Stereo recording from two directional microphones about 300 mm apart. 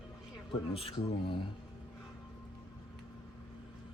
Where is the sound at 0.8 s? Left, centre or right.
Centre.